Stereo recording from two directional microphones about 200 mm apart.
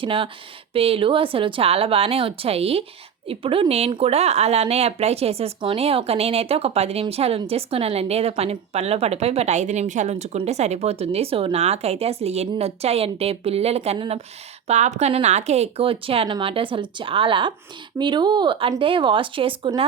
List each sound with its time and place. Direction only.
0.0 s a woman's voice: 25° right (ahead or behind)